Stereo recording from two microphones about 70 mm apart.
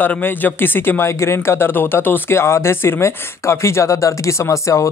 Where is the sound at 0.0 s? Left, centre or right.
Left.